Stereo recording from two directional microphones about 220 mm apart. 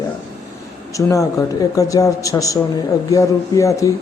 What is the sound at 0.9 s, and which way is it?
Speech, 15° left (ahead or behind).